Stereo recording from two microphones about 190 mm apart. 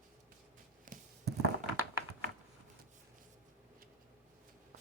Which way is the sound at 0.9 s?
45° right (ahead or behind).